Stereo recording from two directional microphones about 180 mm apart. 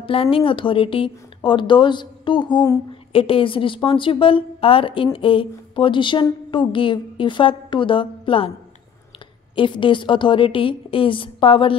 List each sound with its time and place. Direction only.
0.0 s a woman's voice: 30° left (ahead or behind)
9.6 s a woman's voice: 25° left (ahead or behind)